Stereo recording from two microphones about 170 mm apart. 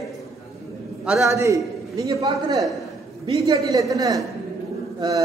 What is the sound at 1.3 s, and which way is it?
A man's voice, 20° right (ahead or behind).